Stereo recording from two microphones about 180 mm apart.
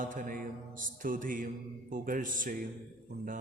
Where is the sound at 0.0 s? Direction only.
50° right (ahead or behind).